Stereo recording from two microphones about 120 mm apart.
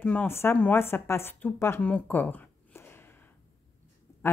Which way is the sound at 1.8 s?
10° left (ahead or behind).